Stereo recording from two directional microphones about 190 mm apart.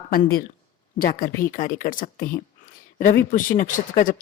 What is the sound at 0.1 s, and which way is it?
Speech, 50° left (ahead or behind).